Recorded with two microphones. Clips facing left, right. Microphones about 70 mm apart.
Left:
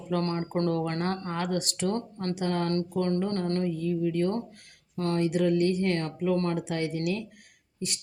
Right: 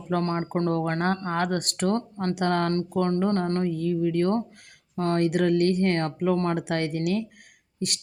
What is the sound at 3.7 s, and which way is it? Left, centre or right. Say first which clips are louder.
Speech: right 3 dB; right.